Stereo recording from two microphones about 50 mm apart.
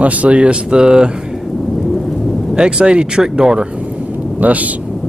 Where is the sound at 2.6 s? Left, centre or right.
Centre.